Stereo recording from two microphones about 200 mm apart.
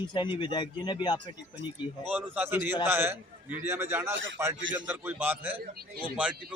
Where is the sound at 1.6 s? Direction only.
10° right (ahead or behind).